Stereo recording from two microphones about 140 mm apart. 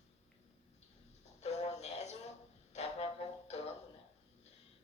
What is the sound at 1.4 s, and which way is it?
Music, 50° left (ahead or behind).